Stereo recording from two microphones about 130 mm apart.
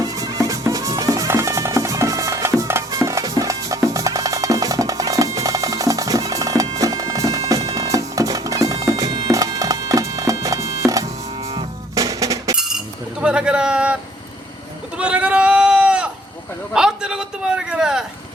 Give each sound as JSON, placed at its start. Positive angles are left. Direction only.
{"t": 0.0, "sound": "music", "side_deg": -30}
{"t": 12.5, "sound": "chink", "side_deg": -5}
{"t": 13.2, "sound": "a sound", "side_deg": -5}